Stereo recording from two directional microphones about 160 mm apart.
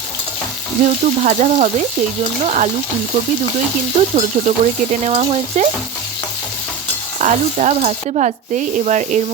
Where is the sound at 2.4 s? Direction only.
45° right (ahead or behind).